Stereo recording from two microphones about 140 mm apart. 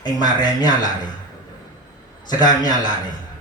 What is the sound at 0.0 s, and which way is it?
Speech, 30° left (ahead or behind).